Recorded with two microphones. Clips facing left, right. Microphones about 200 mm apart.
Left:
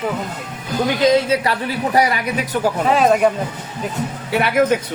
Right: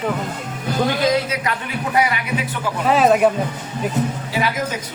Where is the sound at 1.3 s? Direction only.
35° left (ahead or behind).